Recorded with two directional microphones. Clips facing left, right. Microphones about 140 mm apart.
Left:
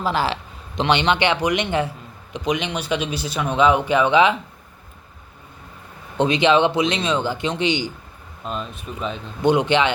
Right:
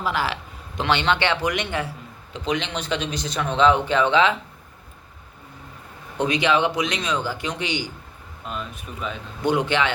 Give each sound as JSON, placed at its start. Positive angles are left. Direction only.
{"t": 0.0, "sound": "a man's voice", "side_deg": 30}
{"t": 0.8, "sound": "a man's voice", "side_deg": 20}
{"t": 6.1, "sound": "a man's voice", "side_deg": 25}